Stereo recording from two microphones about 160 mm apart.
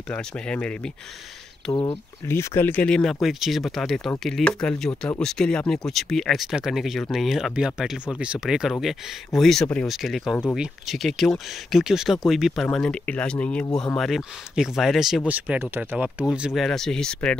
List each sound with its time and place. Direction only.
0.1 s speech: 5° left (ahead or behind)
1.7 s speech: 30° left (ahead or behind)
2.2 s speech: 15° left (ahead or behind)